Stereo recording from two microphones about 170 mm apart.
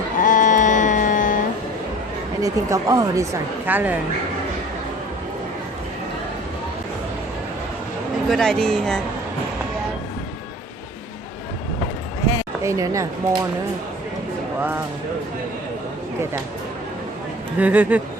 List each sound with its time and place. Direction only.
0.2 s a sound: 50° left (ahead or behind)
2.4 s speech: 20° right (ahead or behind)
3.7 s speech: 10° right (ahead or behind)
8.3 s speech: 5° left (ahead or behind)
12.6 s speech: 20° right (ahead or behind)
17.6 s speech: 10° right (ahead or behind)